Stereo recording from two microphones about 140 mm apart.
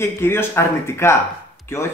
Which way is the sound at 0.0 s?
15° left (ahead or behind).